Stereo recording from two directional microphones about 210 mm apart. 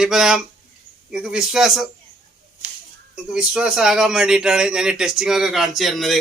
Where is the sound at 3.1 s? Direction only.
5° right (ahead or behind).